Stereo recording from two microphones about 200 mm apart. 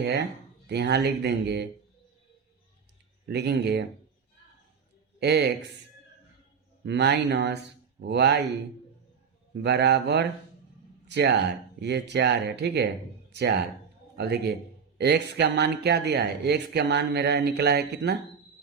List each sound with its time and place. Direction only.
0.0 s speech: 60° right (ahead or behind)
3.2 s speech: 55° right (ahead or behind)
5.2 s speech: 55° right (ahead or behind)
6.8 s speech: 60° right (ahead or behind)
9.6 s speech: 60° right (ahead or behind)
14.2 s speech: 55° right (ahead or behind)